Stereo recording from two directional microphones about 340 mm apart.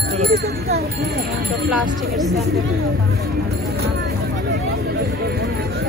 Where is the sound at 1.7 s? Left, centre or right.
Centre.